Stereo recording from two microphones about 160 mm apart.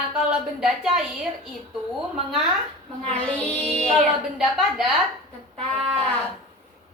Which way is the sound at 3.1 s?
10° left (ahead or behind).